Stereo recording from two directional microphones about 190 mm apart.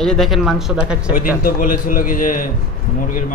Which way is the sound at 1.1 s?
45° left (ahead or behind).